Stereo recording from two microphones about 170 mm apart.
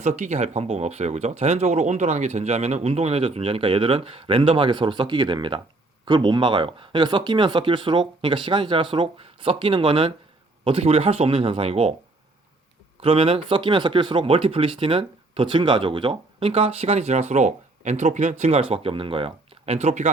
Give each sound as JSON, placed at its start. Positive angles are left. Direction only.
{"t": 0.0, "sound": "speech", "side_deg": -45}
{"t": 13.0, "sound": "speech", "side_deg": -30}